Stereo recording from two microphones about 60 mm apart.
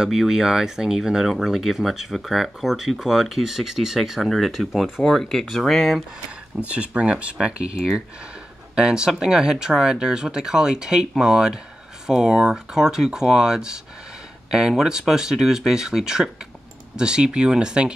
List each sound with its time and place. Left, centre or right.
0.0 s speech: centre
5.0 s speech: centre
6.7 s speech: centre